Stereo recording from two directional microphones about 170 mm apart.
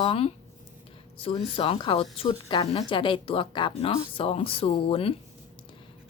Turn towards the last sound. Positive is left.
turn(degrees=35)  # may be behind; listen again after turning